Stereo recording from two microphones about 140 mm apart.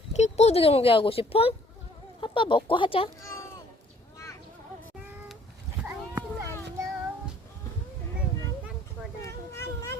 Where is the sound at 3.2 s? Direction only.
20° left (ahead or behind).